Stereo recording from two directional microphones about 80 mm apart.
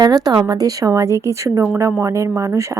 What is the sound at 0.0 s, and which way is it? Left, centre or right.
A woman's voice, right.